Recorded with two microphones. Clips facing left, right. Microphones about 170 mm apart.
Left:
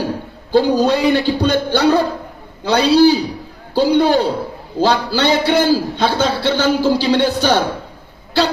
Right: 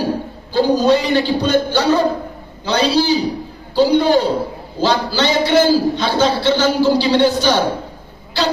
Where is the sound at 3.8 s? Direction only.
60° left (ahead or behind).